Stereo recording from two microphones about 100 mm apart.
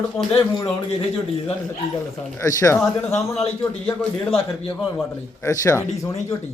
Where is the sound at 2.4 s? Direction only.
30° left (ahead or behind).